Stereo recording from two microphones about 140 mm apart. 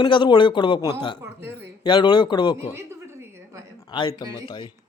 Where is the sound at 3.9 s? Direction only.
35° left (ahead or behind).